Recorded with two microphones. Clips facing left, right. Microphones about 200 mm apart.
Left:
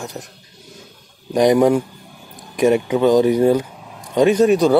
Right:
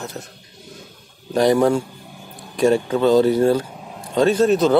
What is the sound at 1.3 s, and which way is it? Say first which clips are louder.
A man's voice: left 2 dB; 15° left (ahead or behind).